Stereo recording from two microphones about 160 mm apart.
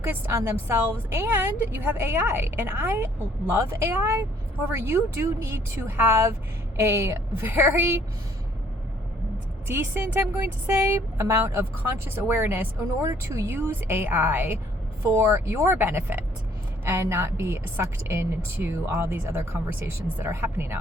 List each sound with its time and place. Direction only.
0.0 s a woman's voice: 15° right (ahead or behind)
9.6 s a woman's voice: 15° right (ahead or behind)